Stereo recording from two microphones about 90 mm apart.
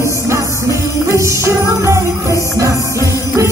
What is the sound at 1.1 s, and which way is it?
Music, 30° right (ahead or behind).